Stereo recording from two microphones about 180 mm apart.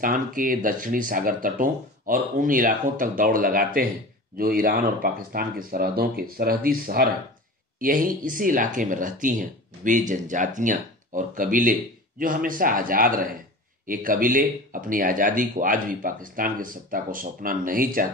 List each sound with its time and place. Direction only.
0.0 s speech: 50° right (ahead or behind)